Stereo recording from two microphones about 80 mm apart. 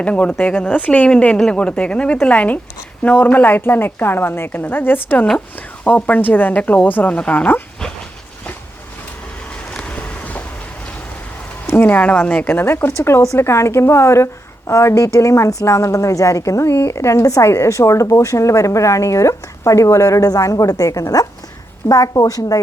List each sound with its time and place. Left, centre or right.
0.0 s a woman's voice: centre
9.7 s vehicle: centre
11.6 s a woman's voice: left